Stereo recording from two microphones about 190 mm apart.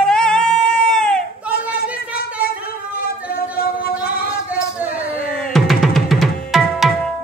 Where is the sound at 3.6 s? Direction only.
55° left (ahead or behind).